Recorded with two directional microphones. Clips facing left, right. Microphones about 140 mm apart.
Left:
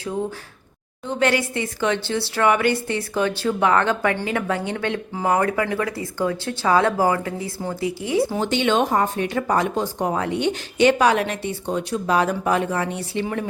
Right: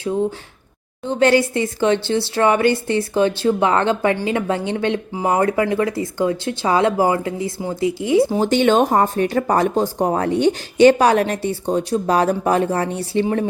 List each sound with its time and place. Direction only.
1.0 s speech: 30° right (ahead or behind)
8.4 s speech: 45° right (ahead or behind)